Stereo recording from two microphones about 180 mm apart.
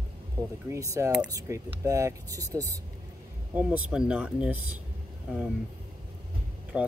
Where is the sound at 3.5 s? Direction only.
5° right (ahead or behind).